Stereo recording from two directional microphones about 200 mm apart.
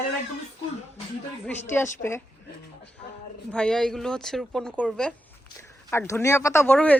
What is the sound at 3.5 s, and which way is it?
Speech, 5° left (ahead or behind).